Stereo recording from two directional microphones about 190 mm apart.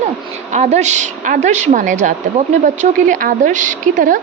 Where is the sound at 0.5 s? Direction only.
40° right (ahead or behind).